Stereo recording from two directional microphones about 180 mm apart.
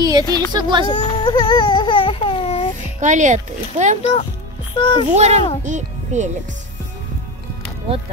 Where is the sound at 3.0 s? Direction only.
45° right (ahead or behind).